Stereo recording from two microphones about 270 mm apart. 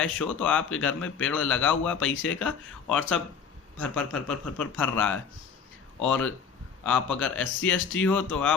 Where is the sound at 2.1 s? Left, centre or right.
Left.